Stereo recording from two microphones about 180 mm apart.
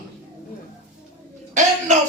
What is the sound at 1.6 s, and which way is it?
Speech, 40° right (ahead or behind).